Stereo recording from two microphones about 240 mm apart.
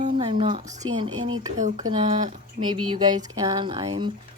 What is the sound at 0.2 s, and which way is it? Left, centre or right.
Speech, right.